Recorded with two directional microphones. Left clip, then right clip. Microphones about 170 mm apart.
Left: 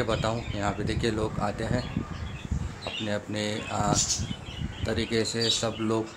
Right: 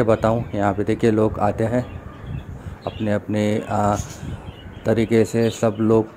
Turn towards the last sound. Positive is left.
turn(degrees=-35)  # may be behind; listen again after turning